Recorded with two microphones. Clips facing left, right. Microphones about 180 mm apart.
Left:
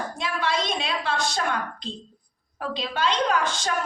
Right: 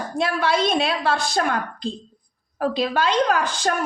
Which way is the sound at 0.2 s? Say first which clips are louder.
Right 7 dB; 60° right (ahead or behind).